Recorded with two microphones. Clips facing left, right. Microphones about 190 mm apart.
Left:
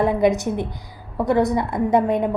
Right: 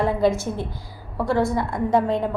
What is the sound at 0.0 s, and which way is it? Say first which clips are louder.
A woman's voice: left 2 dB; 20° left (ahead or behind).